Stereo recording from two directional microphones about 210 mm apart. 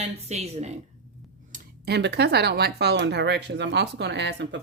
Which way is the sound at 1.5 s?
55° right (ahead or behind).